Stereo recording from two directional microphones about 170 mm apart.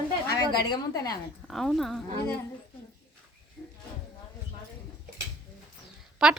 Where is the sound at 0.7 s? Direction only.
20° left (ahead or behind).